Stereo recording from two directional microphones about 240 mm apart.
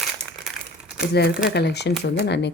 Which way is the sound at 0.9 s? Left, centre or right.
Left.